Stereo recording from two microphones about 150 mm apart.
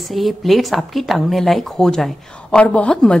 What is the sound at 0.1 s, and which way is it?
A woman's voice, centre (ahead or behind).